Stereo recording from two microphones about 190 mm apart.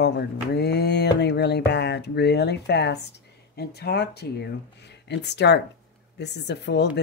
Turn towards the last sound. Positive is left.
turn(degrees=65)  # may be behind; listen again after turning